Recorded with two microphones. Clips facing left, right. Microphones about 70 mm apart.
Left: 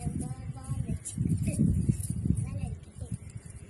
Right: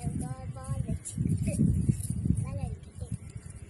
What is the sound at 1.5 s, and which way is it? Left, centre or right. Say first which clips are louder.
Speech: right 1 dB; right.